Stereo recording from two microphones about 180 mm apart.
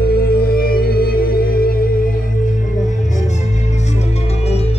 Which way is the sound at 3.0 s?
40° left (ahead or behind).